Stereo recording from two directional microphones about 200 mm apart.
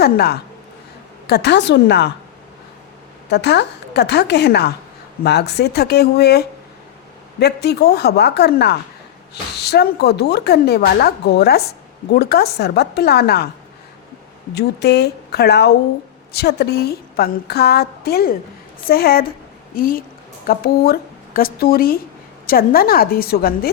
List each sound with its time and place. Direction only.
0.0 s a woman's voice: 50° left (ahead or behind)
3.2 s a woman's voice: 55° left (ahead or behind)
14.5 s a woman's voice: 55° left (ahead or behind)